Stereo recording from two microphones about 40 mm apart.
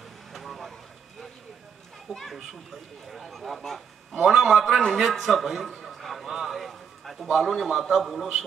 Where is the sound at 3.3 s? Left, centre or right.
Centre.